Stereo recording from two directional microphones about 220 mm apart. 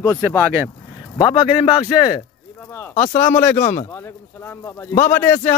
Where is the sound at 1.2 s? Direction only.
20° left (ahead or behind).